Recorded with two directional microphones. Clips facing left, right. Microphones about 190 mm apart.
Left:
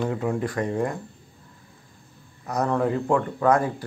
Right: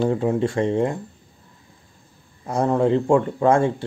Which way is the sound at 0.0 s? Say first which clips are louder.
Right 5 dB; 30° right (ahead or behind).